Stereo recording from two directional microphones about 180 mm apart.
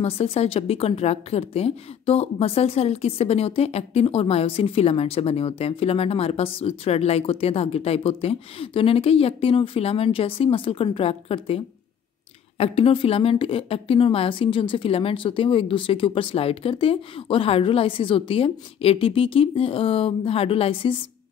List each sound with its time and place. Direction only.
0.0 s a woman's voice: 35° left (ahead or behind)